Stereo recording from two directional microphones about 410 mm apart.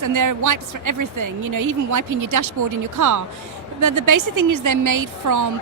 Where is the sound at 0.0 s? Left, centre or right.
Right.